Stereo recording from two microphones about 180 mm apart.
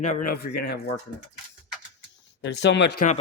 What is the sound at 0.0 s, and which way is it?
Speech, 45° left (ahead or behind).